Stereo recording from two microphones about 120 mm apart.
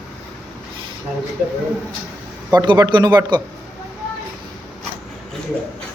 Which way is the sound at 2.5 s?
35° right (ahead or behind).